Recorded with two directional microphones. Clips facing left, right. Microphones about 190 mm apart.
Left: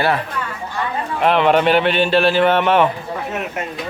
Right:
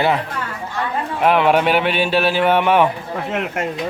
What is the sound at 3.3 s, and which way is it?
Speech, 80° right.